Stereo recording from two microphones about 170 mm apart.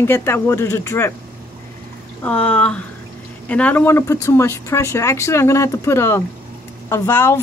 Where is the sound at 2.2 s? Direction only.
10° left (ahead or behind).